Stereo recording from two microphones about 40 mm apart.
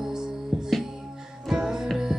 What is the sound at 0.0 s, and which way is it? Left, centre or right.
Music, centre.